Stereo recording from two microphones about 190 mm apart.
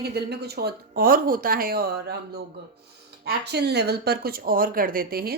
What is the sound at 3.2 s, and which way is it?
A woman's voice, 60° right (ahead or behind).